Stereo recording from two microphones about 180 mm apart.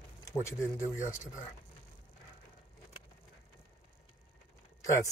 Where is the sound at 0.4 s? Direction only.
15° left (ahead or behind).